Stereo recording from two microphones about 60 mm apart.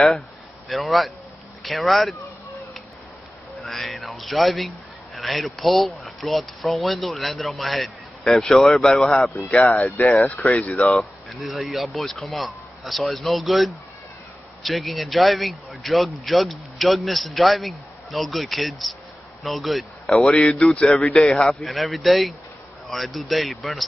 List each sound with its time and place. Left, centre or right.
0.7 s a man's voice: centre
3.6 s a man's voice: centre
9.8 s speech: left
11.2 s a man's voice: centre
20.7 s a man's voice: centre
21.6 s a man's voice: centre